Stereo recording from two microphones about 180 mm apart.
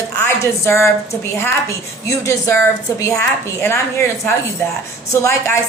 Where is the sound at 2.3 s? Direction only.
15° left (ahead or behind).